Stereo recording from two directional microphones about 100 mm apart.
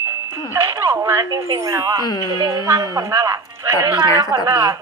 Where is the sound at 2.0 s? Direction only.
45° left (ahead or behind).